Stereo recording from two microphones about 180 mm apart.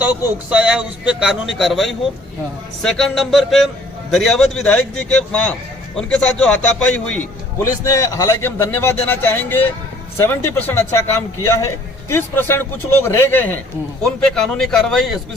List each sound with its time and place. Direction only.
0.5 s a man's voice: 5° right (ahead or behind)